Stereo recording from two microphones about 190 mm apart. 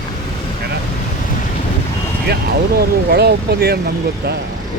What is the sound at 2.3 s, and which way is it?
Speech, 55° right (ahead or behind).